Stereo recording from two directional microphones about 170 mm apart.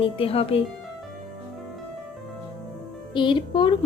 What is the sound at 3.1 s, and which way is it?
Speech, 30° left (ahead or behind).